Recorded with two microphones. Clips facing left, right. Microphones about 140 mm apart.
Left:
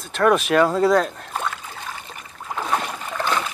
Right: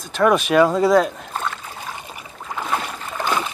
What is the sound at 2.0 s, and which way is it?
Boat, 15° right (ahead or behind).